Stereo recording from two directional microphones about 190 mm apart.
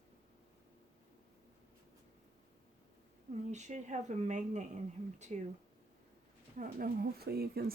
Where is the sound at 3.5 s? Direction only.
40° right (ahead or behind).